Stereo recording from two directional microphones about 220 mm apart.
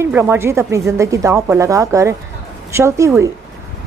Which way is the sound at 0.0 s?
10° right (ahead or behind).